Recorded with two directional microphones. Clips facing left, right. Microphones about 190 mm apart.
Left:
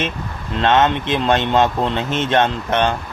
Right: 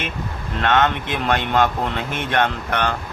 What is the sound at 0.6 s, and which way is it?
Speech, 25° left (ahead or behind).